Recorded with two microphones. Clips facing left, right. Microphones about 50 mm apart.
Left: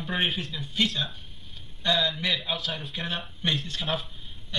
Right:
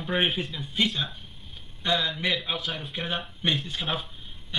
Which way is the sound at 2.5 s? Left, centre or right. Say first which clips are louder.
Right 1 dB; centre.